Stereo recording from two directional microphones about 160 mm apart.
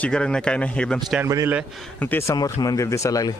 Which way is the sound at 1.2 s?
15° right (ahead or behind).